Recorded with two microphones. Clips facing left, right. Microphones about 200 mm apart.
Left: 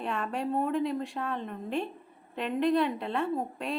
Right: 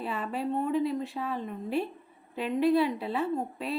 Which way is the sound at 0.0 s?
5° right (ahead or behind).